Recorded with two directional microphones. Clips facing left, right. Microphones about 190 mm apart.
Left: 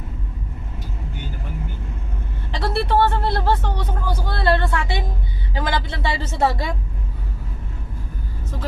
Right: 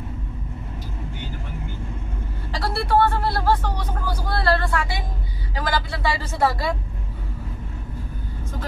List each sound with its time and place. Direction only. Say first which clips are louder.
2.5 s speech: left 1 dB; 25° left (ahead or behind)